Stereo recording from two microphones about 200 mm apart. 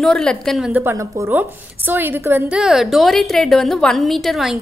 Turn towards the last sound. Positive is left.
turn(degrees=0)  # may be behind; listen again after turning